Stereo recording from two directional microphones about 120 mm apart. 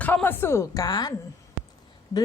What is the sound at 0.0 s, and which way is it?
A woman's voice, 15° left (ahead or behind).